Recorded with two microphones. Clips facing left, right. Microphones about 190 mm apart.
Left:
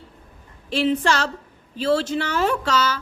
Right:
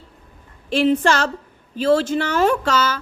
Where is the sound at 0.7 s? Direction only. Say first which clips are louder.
Right 4 dB; 50° right (ahead or behind).